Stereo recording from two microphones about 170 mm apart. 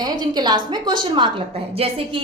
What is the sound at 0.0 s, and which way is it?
A woman's voice, 25° right (ahead or behind).